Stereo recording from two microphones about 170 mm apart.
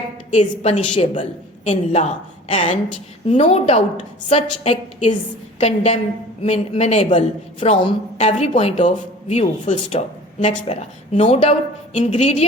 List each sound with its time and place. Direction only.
0.3 s a woman's voice: 40° left (ahead or behind)